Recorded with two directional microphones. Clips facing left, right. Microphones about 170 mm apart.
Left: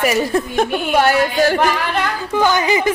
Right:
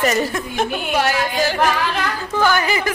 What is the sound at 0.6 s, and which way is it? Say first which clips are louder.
Speech: left 3 dB; 55° left (ahead or behind).